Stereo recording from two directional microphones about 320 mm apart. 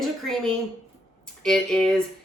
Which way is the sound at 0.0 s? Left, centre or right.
Centre.